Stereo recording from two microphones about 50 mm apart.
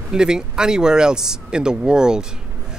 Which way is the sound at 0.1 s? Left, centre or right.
Centre.